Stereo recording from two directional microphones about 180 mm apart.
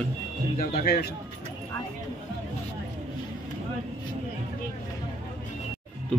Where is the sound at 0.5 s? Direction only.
55° left (ahead or behind).